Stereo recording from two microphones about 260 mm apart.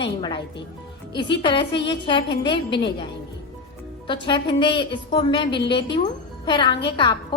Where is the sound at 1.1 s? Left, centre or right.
Centre.